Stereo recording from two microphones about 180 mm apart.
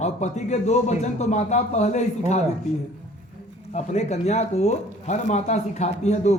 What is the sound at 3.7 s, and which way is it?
A man's voice, 35° left (ahead or behind).